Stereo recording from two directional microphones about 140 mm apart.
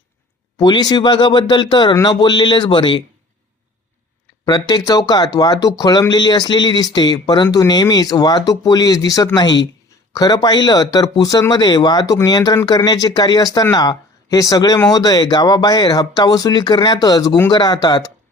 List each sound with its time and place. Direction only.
0.6 s speech: 30° left (ahead or behind)
4.4 s speech: 30° left (ahead or behind)